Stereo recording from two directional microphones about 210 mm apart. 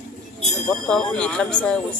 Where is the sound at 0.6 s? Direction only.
5° left (ahead or behind).